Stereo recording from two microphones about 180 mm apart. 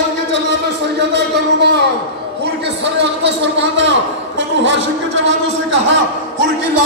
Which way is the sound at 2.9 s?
75° right (ahead or behind).